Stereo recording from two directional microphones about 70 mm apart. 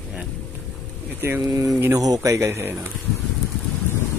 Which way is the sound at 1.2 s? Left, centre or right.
Right.